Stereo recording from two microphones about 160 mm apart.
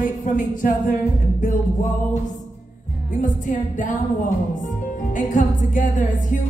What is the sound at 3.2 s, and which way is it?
Music, 55° left (ahead or behind).